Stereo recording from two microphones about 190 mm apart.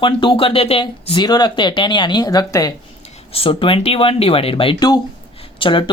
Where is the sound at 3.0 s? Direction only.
35° left (ahead or behind).